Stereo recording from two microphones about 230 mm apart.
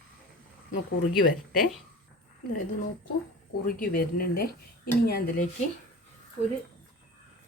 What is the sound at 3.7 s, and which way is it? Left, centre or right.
Speech, left.